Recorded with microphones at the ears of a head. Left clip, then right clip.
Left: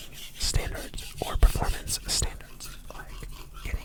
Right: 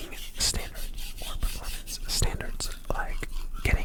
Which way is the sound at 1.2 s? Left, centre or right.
Left.